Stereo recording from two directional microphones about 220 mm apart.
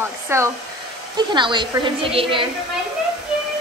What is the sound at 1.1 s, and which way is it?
A woman's voice, 20° right (ahead or behind).